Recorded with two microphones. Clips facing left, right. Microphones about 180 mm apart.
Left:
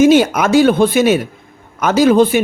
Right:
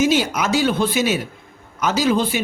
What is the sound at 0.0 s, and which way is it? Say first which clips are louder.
A man's voice: left 8 dB; 55° left (ahead or behind).